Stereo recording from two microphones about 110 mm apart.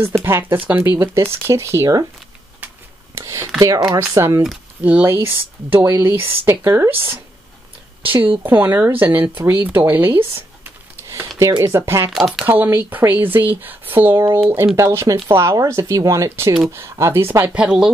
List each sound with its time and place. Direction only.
0.2 s speech: 20° right (ahead or behind)
3.2 s speech: 25° right (ahead or behind)
8.0 s speech: 50° right (ahead or behind)
8.4 s speech: 20° right (ahead or behind)
9.8 s a sound: 20° right (ahead or behind)
11.6 s speech: 25° right (ahead or behind)
12.1 s speech: centre (ahead or behind)
12.4 s speech: 20° right (ahead or behind)
17.6 s speech: 5° right (ahead or behind)